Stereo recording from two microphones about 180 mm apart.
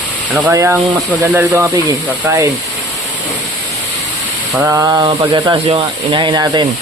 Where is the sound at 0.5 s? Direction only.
15° right (ahead or behind).